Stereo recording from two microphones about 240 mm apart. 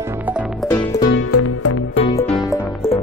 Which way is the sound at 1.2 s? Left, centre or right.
Left.